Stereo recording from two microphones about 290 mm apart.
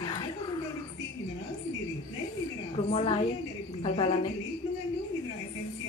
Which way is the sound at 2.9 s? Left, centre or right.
Centre.